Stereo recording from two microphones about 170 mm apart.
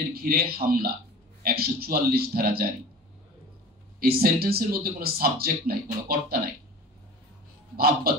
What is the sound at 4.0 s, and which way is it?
Speech, 65° right (ahead or behind).